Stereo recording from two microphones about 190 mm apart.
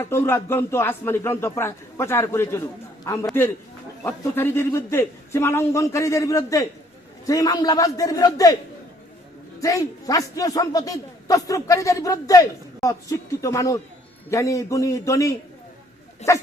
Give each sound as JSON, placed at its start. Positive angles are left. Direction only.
{"t": 0.0, "sound": "a man's voice", "side_deg": 10}
{"t": 9.6, "sound": "a man's voice", "side_deg": 15}